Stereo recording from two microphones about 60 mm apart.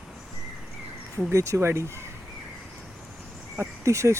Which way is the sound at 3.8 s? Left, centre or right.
Right.